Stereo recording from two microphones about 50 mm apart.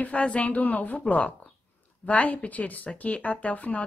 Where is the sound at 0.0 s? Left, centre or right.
Left.